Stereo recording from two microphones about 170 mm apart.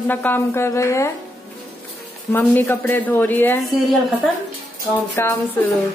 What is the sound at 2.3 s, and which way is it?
A woman's voice, 10° left (ahead or behind).